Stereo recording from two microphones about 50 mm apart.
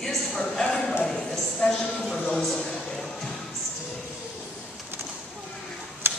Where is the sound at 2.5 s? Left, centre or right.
Centre.